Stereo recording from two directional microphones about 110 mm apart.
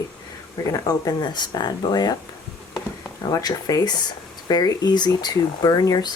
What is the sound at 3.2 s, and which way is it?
Speech, 40° left (ahead or behind).